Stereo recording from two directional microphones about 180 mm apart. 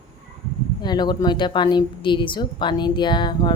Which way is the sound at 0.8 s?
25° left (ahead or behind).